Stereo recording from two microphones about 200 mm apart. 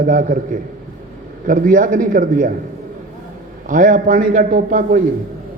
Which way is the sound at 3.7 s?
40° right (ahead or behind).